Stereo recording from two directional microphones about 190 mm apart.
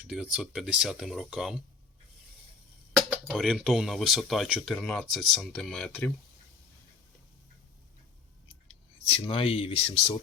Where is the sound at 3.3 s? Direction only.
5° right (ahead or behind).